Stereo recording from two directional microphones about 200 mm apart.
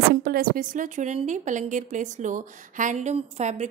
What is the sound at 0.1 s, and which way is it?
A woman's voice, 50° right (ahead or behind).